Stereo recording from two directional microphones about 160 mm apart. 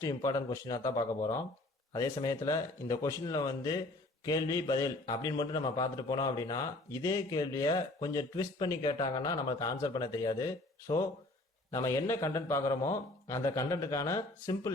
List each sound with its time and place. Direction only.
0.0 s a man's voice: 20° left (ahead or behind)